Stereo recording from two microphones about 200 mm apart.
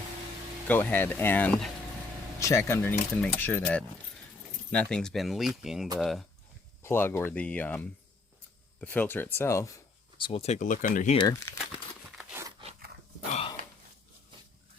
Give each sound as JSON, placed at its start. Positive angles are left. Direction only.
{"t": 0.7, "sound": "speech", "side_deg": 10}
{"t": 6.8, "sound": "speech", "side_deg": 10}
{"t": 11.2, "sound": "speech", "side_deg": 15}
{"t": 12.1, "sound": "crunch", "side_deg": -10}